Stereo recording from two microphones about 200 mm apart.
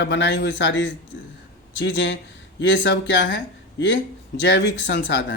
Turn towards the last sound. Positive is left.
turn(degrees=65)  # may be behind; listen again after turning